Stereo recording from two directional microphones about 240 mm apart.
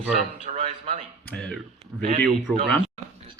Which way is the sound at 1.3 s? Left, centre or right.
Centre.